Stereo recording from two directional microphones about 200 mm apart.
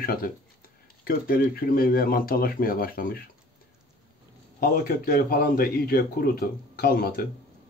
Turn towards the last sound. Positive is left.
turn(degrees=50)  # may be behind; listen again after turning